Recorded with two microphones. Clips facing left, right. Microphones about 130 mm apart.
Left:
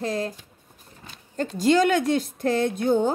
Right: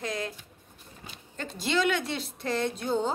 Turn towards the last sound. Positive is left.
turn(degrees=55)  # may be behind; listen again after turning